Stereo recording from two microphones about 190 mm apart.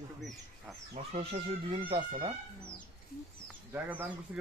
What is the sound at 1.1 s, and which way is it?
Speech, 30° right (ahead or behind).